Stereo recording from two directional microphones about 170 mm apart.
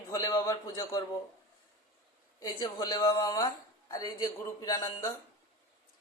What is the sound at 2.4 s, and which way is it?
A man's voice, 20° left (ahead or behind).